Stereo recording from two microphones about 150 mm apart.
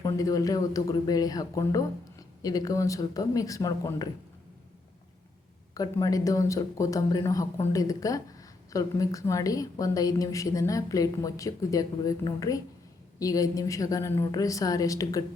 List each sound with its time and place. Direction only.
0.0 s speech: 25° left (ahead or behind)
5.7 s speech: 25° left (ahead or behind)